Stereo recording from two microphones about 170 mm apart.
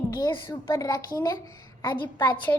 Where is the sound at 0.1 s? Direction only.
20° left (ahead or behind).